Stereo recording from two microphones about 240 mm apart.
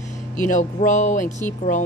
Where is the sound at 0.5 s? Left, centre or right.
Left.